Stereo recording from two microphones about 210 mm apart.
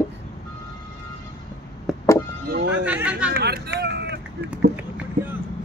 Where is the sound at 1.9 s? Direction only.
Centre (ahead or behind).